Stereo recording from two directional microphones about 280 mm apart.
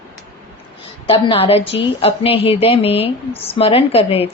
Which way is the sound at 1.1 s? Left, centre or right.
Centre.